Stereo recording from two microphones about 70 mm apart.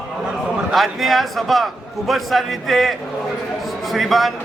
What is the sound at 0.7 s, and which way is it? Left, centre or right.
A man's voice, centre.